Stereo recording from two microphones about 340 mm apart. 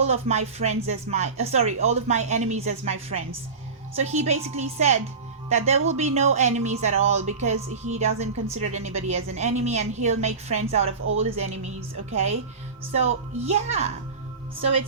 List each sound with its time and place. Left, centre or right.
0.0 s speech: centre